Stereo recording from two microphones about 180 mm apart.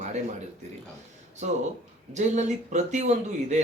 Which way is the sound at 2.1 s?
40° right (ahead or behind).